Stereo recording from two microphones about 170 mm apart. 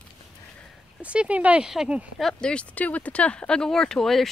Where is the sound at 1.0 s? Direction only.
5° right (ahead or behind).